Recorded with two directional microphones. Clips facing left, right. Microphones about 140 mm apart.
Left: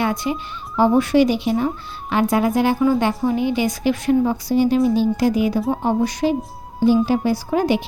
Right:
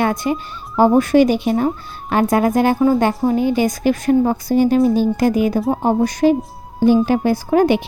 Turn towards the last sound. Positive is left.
turn(degrees=-55)  # may be behind; listen again after turning